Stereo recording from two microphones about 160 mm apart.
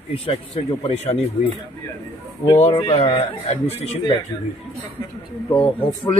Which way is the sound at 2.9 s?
35° left (ahead or behind).